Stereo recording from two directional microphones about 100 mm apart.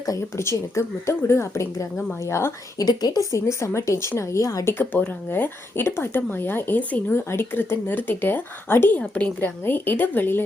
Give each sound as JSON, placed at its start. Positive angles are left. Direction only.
{"t": 0.0, "sound": "speech", "side_deg": 30}
{"t": 2.8, "sound": "speech", "side_deg": 40}
{"t": 4.8, "sound": "speech", "side_deg": 20}